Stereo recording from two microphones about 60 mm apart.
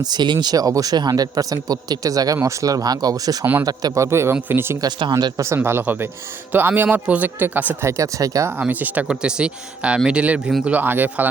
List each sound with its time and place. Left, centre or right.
0.5 s speech: right
2.4 s speech: right
3.6 s a man's voice: right
4.0 s speech: right
4.4 s speech: right
4.8 s speech: right
5.5 s speech: right
7.0 s speech: right
7.8 s speech: right
8.6 s speech: right
9.0 s speech: centre
10.7 s speech: right